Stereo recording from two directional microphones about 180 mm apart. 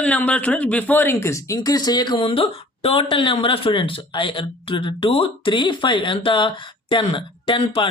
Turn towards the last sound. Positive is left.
turn(degrees=30)  # may be behind; listen again after turning